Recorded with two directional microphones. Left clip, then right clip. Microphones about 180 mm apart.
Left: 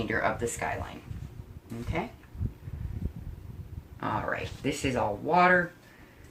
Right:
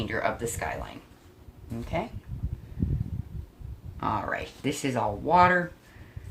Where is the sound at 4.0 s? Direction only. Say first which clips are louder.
Right 2 dB; 45° right (ahead or behind).